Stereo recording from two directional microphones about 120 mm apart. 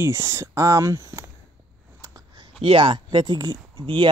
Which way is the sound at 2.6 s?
45° right (ahead or behind).